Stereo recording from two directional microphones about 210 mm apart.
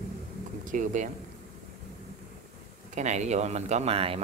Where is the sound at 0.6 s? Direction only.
40° right (ahead or behind).